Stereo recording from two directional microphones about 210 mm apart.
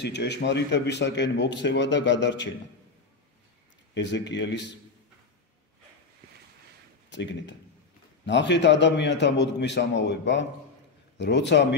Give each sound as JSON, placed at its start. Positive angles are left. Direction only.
{"t": 0.0, "sound": "speech", "side_deg": 55}
{"t": 3.9, "sound": "speech", "side_deg": 55}
{"t": 7.1, "sound": "speech", "side_deg": 60}